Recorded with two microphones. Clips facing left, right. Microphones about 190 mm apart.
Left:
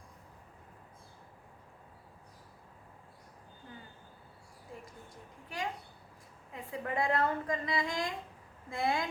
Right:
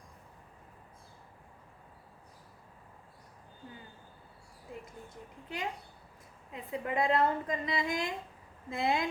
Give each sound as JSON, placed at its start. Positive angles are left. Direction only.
{"t": 5.0, "sound": "a woman's voice", "side_deg": -20}